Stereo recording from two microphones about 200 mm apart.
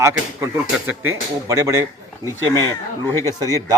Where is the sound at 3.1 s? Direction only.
15° left (ahead or behind).